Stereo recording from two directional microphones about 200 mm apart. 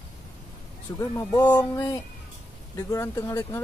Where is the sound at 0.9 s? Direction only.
15° left (ahead or behind).